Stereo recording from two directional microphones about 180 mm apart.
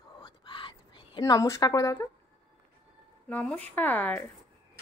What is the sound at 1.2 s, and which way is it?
Speech, 20° left (ahead or behind).